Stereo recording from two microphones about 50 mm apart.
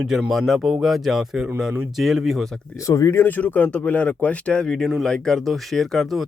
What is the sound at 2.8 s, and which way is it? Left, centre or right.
Speech, left.